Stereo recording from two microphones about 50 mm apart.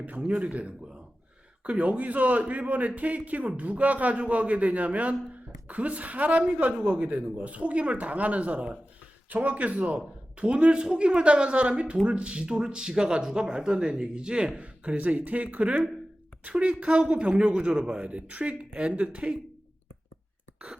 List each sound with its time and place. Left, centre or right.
0.2 s a woman's voice: right
17.9 s a woman's voice: right
20.6 s a woman's voice: right